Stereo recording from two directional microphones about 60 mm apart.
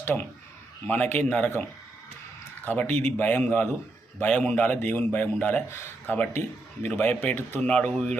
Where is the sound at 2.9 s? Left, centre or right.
Left.